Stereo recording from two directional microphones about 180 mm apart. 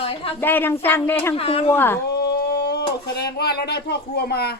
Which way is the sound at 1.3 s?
30° left (ahead or behind).